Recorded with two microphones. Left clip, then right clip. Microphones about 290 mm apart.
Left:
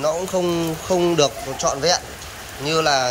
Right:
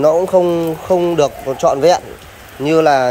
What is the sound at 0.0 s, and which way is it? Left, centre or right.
Speech, right.